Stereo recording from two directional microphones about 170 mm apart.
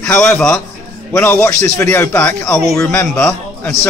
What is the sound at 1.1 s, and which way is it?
A man's voice, 15° left (ahead or behind).